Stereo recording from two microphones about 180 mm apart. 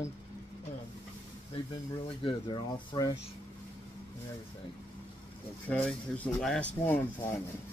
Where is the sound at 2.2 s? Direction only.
30° left (ahead or behind).